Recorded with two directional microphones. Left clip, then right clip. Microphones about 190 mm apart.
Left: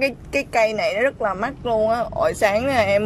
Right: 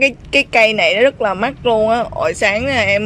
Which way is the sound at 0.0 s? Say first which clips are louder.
Right 8 dB; 15° right (ahead or behind).